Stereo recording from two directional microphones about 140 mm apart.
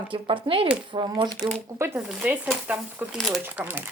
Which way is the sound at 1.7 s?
20° right (ahead or behind).